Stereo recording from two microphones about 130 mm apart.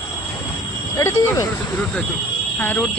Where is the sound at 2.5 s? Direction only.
10° left (ahead or behind).